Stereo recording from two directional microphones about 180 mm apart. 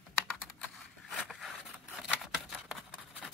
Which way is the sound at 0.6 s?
Centre (ahead or behind).